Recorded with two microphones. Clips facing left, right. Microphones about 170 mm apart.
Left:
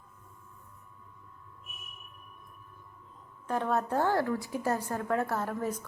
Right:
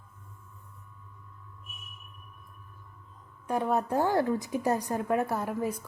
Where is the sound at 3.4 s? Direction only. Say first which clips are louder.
Right 2 dB; 10° right (ahead or behind).